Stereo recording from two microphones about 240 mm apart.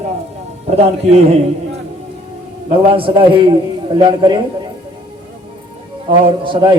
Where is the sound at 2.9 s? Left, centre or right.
Right.